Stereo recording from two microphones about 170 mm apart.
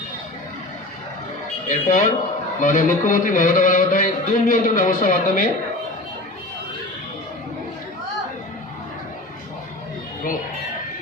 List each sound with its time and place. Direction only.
1.6 s a man's voice: 45° left (ahead or behind)